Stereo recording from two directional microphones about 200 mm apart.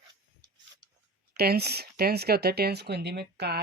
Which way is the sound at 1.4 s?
50° right (ahead or behind).